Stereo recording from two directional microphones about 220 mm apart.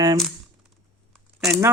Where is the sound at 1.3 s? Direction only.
5° right (ahead or behind).